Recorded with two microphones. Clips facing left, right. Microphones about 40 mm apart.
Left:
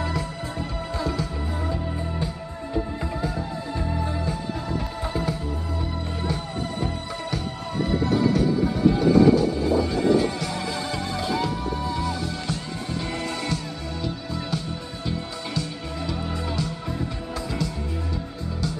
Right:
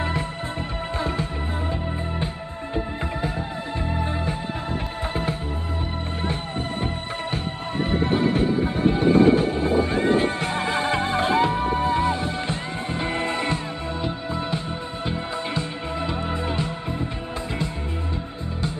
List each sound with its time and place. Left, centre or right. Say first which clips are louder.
0.9 s music: right 1 dB; right
2.7 s music: even; right
7.9 s music: even; right